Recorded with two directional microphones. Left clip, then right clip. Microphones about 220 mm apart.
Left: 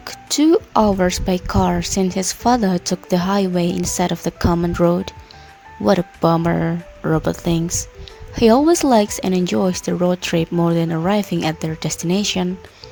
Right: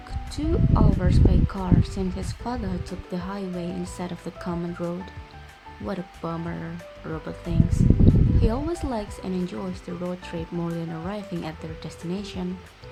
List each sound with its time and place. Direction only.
0.3 s speech: 40° left (ahead or behind)